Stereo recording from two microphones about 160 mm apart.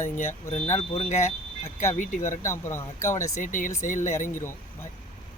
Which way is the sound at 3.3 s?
55° left (ahead or behind).